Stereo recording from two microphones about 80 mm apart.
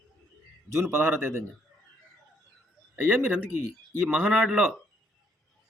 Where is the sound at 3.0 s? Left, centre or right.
Right.